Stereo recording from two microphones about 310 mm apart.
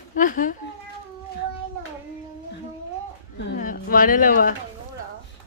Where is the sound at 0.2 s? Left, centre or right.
Left.